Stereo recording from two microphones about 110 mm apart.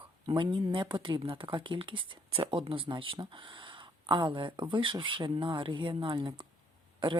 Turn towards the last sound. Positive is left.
turn(degrees=-45)  # may be behind; listen again after turning